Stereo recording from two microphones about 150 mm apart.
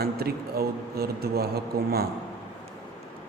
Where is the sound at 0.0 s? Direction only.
90° right.